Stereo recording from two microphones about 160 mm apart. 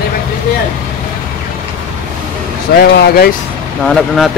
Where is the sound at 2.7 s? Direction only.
75° left (ahead or behind).